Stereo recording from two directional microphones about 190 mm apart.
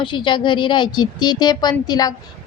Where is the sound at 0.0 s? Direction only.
25° left (ahead or behind).